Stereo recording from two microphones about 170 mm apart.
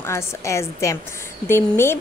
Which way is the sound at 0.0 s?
15° left (ahead or behind).